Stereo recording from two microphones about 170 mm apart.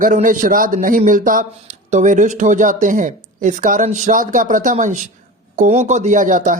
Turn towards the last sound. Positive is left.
turn(degrees=-50)  # may be behind; listen again after turning